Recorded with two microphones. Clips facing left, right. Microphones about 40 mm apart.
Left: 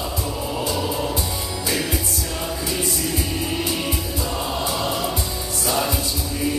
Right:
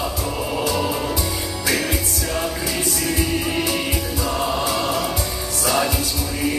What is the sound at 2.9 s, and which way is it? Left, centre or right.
Music, right.